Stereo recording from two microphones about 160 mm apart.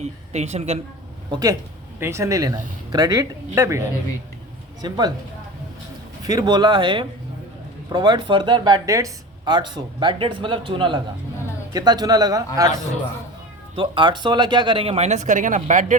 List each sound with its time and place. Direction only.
0.0 s speech: 45° right (ahead or behind)
1.3 s speech: 25° right (ahead or behind)
6.2 s speech: 25° right (ahead or behind)
13.7 s speech: 30° right (ahead or behind); by 16.0 s 50° right (ahead or behind)